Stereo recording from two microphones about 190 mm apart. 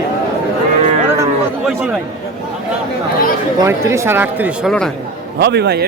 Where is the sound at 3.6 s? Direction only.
15° right (ahead or behind).